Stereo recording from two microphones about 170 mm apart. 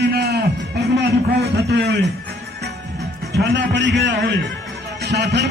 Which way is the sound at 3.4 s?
90° right.